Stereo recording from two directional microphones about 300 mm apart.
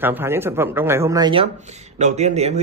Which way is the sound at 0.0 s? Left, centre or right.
Centre.